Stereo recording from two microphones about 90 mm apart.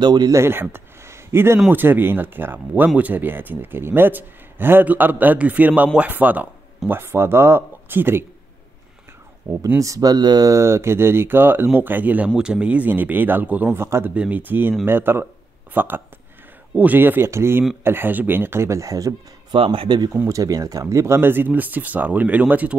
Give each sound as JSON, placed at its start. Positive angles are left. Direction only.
{"t": 0.0, "sound": "speech", "side_deg": -50}
{"t": 0.3, "sound": "a man's voice", "side_deg": -25}
{"t": 9.5, "sound": "speech", "side_deg": -15}
{"t": 9.8, "sound": "a man's voice", "side_deg": -40}
{"t": 13.8, "sound": "a man's voice", "side_deg": -30}
{"t": 14.1, "sound": "a man's voice", "side_deg": -15}
{"t": 19.5, "sound": "speech", "side_deg": -85}
{"t": 20.2, "sound": "a man's voice", "side_deg": -40}